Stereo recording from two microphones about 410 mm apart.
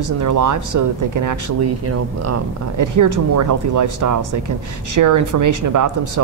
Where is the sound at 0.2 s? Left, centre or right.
Right.